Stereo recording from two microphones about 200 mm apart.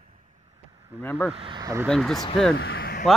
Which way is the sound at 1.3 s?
25° right (ahead or behind).